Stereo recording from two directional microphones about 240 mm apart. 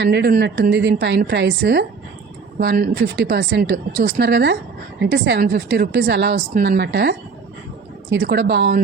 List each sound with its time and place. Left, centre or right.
0.0 s a woman's voice: right